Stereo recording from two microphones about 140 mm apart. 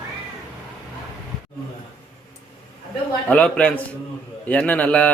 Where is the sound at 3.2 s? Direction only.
10° left (ahead or behind).